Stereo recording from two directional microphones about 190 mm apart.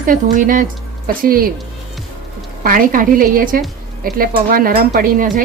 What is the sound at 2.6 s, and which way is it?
Speech, 45° right (ahead or behind).